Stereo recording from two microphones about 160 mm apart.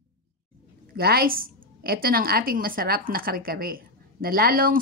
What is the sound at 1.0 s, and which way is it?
A woman's voice, 70° right (ahead or behind).